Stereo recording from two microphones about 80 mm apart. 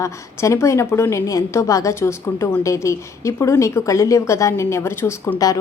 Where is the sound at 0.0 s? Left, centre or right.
Left.